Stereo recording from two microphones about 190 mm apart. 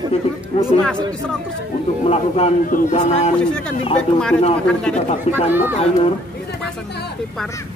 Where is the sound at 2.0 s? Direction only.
35° left (ahead or behind).